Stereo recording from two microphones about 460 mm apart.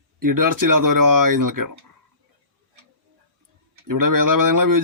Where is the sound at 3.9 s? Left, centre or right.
Right.